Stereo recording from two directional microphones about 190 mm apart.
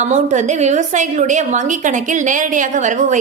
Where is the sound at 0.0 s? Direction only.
40° right (ahead or behind).